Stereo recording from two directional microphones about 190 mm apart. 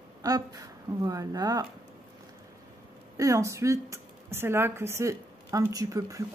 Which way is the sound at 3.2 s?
15° right (ahead or behind).